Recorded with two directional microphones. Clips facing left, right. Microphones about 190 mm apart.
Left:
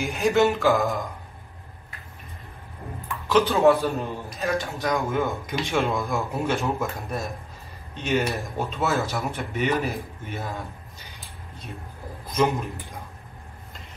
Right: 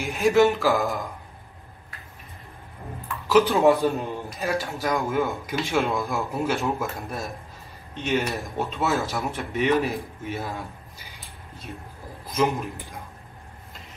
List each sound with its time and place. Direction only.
0.0 s a man's voice: centre (ahead or behind)
3.4 s a man's voice: 15° right (ahead or behind)
4.7 s a man's voice: centre (ahead or behind)
12.3 s a man's voice: centre (ahead or behind)